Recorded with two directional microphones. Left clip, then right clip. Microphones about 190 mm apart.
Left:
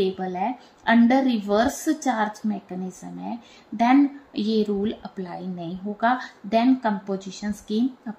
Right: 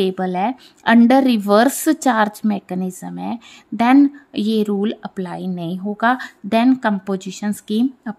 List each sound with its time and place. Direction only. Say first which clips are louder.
0.0 s speech: right 6 dB; 60° right (ahead or behind)